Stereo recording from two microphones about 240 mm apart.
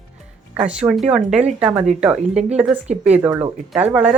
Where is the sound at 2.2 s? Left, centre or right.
Right.